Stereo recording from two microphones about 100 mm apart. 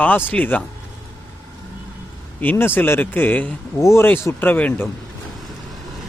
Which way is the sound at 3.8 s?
30° left (ahead or behind).